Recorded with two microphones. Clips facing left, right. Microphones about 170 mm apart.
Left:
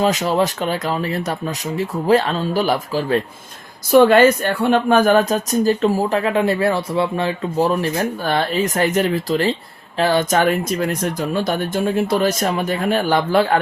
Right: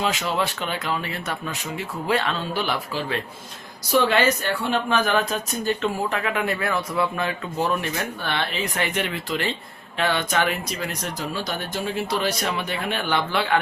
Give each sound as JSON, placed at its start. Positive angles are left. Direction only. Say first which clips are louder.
{"t": 0.0, "sound": "speech", "louder": "left 7 dB", "side_deg": 40}